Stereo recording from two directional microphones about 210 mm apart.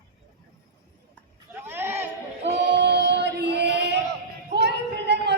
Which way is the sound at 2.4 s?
55° right (ahead or behind).